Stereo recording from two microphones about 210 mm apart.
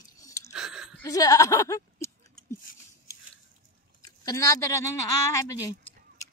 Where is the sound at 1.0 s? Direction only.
15° left (ahead or behind).